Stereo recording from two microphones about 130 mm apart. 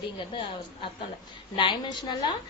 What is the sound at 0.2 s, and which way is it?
A woman's voice, 40° left (ahead or behind).